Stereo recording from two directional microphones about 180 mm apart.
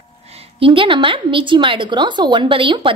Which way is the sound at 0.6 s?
30° right (ahead or behind).